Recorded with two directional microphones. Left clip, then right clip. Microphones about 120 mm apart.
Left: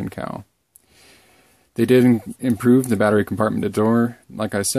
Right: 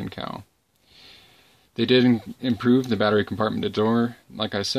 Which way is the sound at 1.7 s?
45° left (ahead or behind).